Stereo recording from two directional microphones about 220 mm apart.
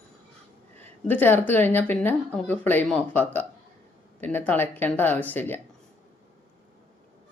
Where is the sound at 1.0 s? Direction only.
10° left (ahead or behind).